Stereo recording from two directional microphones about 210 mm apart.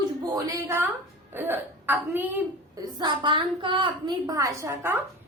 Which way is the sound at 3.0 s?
25° right (ahead or behind).